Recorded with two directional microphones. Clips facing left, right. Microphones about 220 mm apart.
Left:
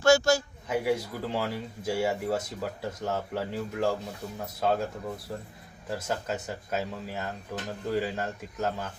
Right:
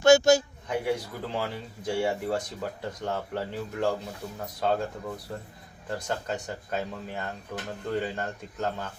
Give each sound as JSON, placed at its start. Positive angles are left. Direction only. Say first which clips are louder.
{"t": 0.0, "sound": "a man's voice", "louder": "right 3 dB", "side_deg": -20}
{"t": 0.7, "sound": "speech", "louder": "left 1 dB", "side_deg": 5}